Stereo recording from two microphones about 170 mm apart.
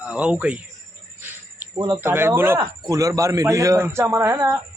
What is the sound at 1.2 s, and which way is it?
Jingle bell, 10° right (ahead or behind).